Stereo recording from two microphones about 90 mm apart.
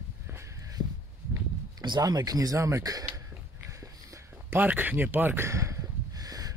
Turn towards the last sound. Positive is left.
turn(degrees=-45)  # may be behind; listen again after turning